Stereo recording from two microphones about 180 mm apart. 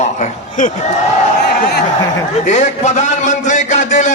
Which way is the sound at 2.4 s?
40° left (ahead or behind).